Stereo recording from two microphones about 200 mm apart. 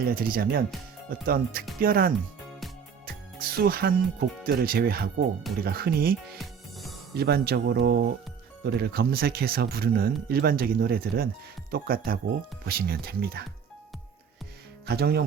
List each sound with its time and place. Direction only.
0.0 s speech: 45° right (ahead or behind)
3.3 s speech: 50° right (ahead or behind)
6.4 s music: centre (ahead or behind)
7.1 s speech: 55° right (ahead or behind)
14.8 s speech: 55° right (ahead or behind)